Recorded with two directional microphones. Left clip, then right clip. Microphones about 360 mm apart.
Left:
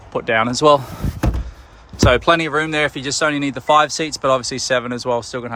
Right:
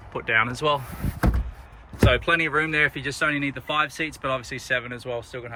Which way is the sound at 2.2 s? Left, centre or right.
Centre.